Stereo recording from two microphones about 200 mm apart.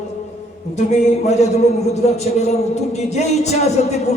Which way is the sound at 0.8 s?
35° left (ahead or behind).